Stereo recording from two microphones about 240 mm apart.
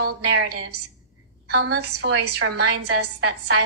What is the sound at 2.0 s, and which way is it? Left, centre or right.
Speech, right.